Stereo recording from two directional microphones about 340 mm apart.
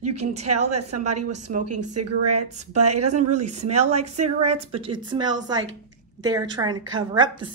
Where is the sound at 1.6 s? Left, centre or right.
Right.